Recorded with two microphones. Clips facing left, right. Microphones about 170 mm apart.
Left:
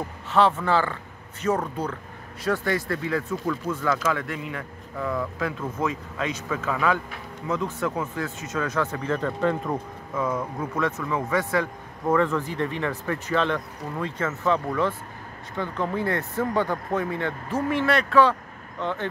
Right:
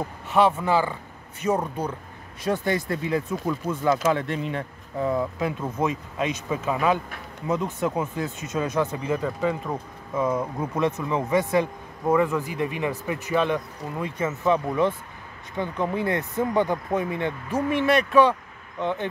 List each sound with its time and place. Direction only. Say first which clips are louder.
0.3 s a man's voice: right 1 dB; 15° right (ahead or behind)
10.1 s a man's voice: right 2 dB; 20° right (ahead or behind)